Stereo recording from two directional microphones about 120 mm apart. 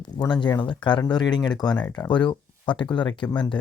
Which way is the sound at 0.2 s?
40° left (ahead or behind).